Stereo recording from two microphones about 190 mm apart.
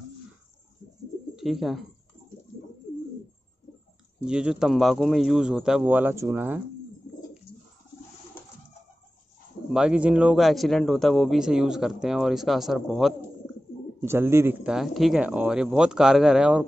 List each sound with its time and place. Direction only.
1.3 s speech: centre (ahead or behind)
4.2 s a man's voice: 5° right (ahead or behind)
9.7 s a man's voice: 5° right (ahead or behind)
14.0 s a man's voice: 15° right (ahead or behind)